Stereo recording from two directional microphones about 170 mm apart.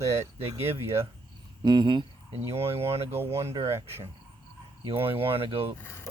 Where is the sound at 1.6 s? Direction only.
25° right (ahead or behind).